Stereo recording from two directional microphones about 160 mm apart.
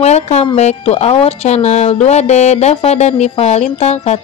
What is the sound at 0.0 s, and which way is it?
Music, 45° left (ahead or behind).